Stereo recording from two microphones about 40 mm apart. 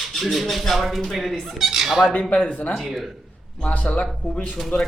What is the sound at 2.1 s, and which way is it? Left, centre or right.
Speech, left.